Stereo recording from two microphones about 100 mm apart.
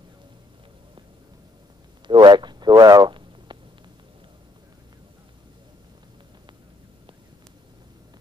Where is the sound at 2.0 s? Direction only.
50° right (ahead or behind).